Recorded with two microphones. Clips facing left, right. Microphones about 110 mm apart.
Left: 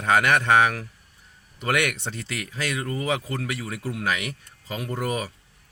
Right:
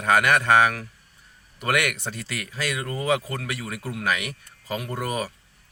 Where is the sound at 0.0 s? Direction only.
25° left (ahead or behind).